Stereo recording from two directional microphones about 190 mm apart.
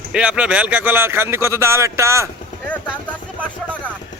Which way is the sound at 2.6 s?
5° left (ahead or behind).